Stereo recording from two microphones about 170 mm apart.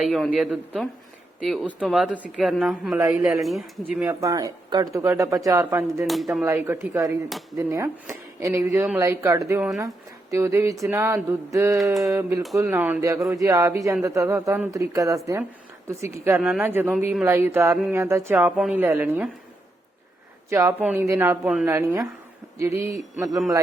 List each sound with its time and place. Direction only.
0.0 s speech: 5° right (ahead or behind)
3.0 s speech: 15° right (ahead or behind)
3.4 s speech: centre (ahead or behind)
4.0 s speech: 20° right (ahead or behind)
6.1 s speech: centre (ahead or behind)
6.4 s speech: 15° right (ahead or behind)
20.5 s speech: 20° right (ahead or behind)